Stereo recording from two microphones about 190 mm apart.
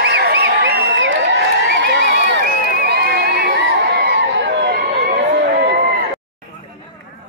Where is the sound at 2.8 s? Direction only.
60° right (ahead or behind).